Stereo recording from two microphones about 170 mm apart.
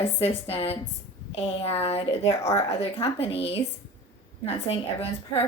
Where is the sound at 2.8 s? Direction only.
35° left (ahead or behind).